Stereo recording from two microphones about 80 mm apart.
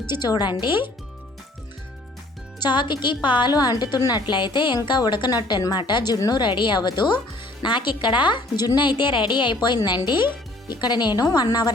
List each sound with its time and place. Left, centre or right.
0.1 s a woman's voice: left
2.6 s a woman's voice: left
3.5 s a woman's voice: left
6.3 s a woman's voice: left
7.6 s a woman's voice: left